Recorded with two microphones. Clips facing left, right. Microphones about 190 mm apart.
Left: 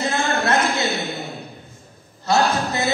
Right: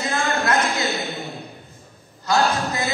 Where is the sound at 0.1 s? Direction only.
25° left (ahead or behind).